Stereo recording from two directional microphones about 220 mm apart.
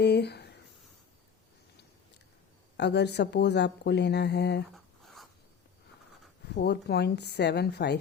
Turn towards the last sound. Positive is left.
turn(degrees=50)  # may be behind; listen again after turning